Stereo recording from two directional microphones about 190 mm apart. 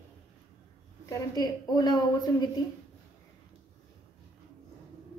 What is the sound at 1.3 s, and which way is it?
A woman's voice, 20° left (ahead or behind).